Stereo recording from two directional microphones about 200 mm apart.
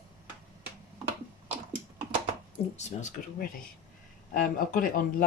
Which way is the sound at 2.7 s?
35° left (ahead or behind).